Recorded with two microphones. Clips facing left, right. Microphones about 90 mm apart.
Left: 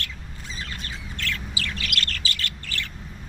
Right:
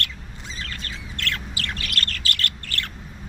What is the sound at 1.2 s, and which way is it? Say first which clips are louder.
Bird: right 1 dB; 60° right (ahead or behind).